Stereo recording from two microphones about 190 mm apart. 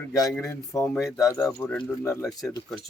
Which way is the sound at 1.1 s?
15° left (ahead or behind).